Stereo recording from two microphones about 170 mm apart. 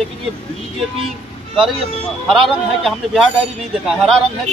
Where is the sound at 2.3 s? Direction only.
Centre (ahead or behind).